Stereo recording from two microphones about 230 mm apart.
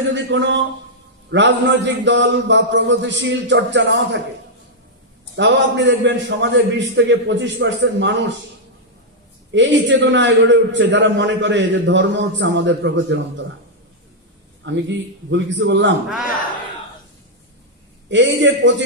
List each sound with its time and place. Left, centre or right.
0.0 s a man's voice: right
5.3 s a man's voice: right
9.5 s a man's voice: right
14.6 s a man's voice: right
18.1 s a man's voice: right